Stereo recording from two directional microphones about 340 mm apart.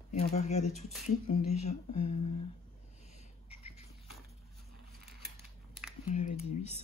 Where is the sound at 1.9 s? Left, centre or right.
Left.